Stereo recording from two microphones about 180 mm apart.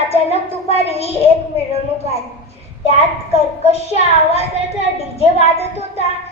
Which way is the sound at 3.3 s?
35° left (ahead or behind).